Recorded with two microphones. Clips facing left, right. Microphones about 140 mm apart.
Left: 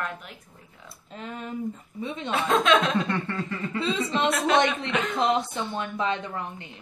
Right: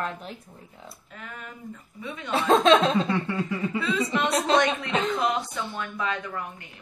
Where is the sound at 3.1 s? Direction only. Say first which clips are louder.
Right 2 dB; 10° right (ahead or behind).